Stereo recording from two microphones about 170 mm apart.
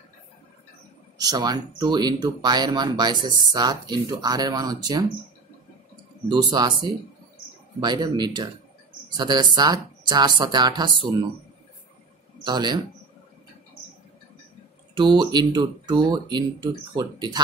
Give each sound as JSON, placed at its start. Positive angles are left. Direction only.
{"t": 1.1, "sound": "speech", "side_deg": -25}
{"t": 6.2, "sound": "speech", "side_deg": -25}
{"t": 7.8, "sound": "speech", "side_deg": -25}
{"t": 12.4, "sound": "speech", "side_deg": -25}
{"t": 15.0, "sound": "speech", "side_deg": -25}